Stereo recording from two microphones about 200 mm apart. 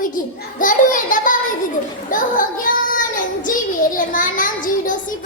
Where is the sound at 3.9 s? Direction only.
40° left (ahead or behind).